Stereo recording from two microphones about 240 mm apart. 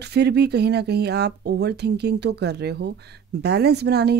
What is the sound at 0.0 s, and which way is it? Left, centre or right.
Speech, right.